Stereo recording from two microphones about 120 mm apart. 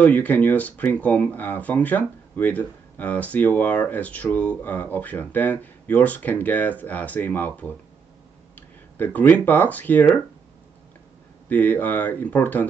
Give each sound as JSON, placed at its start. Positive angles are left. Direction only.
{"t": 0.0, "sound": "speech", "side_deg": 15}
{"t": 11.4, "sound": "speech", "side_deg": 15}